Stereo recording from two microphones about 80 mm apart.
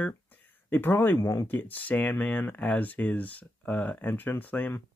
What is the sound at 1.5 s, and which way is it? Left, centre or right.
Speech, left.